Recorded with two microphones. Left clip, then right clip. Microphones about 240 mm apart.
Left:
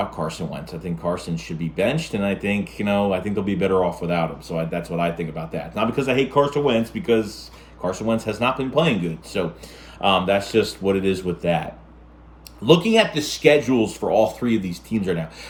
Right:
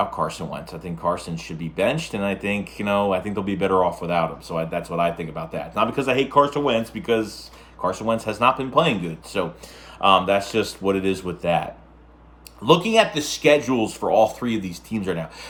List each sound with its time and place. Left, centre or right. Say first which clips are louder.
0.0 s speech: right 2 dB; centre